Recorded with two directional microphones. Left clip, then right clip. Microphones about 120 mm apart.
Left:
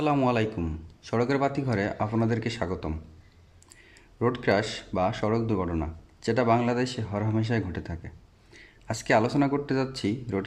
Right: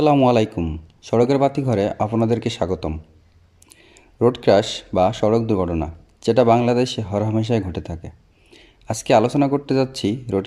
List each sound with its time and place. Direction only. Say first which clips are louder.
0.0 s speech: right 9 dB; 35° right (ahead or behind)